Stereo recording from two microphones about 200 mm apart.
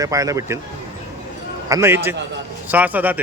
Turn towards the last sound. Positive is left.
turn(degrees=-10)  # may be behind; listen again after turning